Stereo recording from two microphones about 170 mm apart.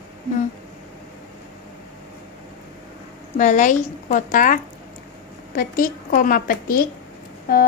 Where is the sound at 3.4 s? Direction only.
50° left (ahead or behind).